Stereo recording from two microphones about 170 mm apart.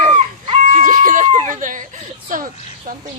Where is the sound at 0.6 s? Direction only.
50° right (ahead or behind).